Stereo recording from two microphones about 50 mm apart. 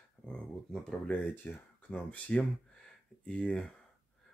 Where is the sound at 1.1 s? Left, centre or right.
Left; by 3.6 s centre.